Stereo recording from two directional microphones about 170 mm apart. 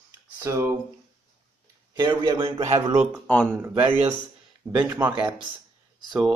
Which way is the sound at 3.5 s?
10° right (ahead or behind).